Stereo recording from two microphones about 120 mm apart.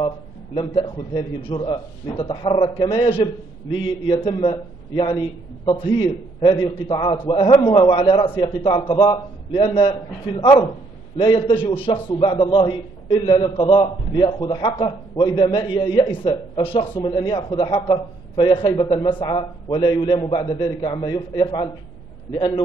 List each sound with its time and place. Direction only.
0.6 s a man's voice: 45° left (ahead or behind)